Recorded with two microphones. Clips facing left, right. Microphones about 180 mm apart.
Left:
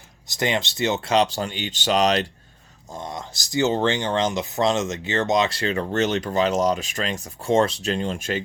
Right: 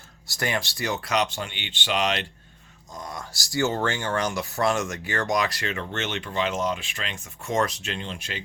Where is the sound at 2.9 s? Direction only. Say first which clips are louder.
Left 4 dB; 25° left (ahead or behind).